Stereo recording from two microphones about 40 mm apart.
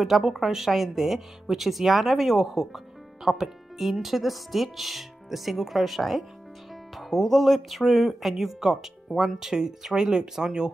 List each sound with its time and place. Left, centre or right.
0.0 s speech: centre